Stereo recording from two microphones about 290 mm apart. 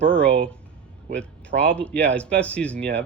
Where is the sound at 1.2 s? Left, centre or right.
Centre.